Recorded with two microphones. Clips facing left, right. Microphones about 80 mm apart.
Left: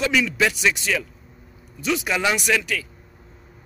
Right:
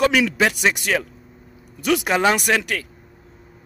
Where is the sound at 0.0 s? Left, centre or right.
Right.